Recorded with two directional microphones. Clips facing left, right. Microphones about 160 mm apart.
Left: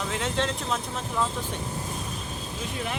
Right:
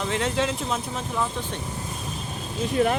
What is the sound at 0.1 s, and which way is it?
Speech, centre (ahead or behind).